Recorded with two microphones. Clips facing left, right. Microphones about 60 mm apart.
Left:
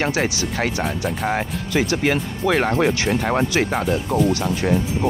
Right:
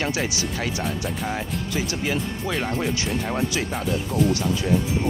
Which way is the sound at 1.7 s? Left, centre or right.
Left.